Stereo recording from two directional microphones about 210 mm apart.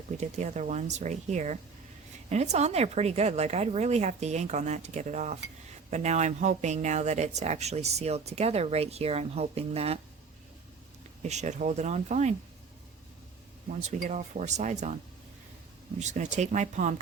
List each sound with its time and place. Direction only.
0.2 s speech: 35° right (ahead or behind)
11.2 s speech: 35° right (ahead or behind)
13.7 s speech: 35° right (ahead or behind)
16.0 s speech: 35° right (ahead or behind)